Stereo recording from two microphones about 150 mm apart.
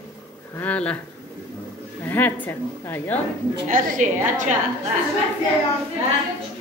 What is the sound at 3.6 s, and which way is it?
Speech, 65° right (ahead or behind).